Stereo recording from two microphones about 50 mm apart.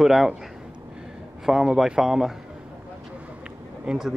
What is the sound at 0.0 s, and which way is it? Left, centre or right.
Speech, centre.